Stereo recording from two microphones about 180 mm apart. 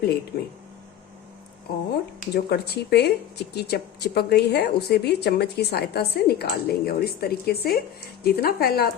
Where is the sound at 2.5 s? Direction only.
65° left (ahead or behind).